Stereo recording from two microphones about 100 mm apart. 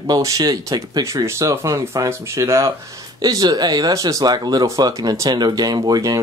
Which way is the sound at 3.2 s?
40° right (ahead or behind).